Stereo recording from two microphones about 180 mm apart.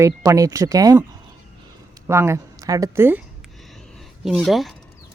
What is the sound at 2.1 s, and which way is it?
Speech, 15° right (ahead or behind).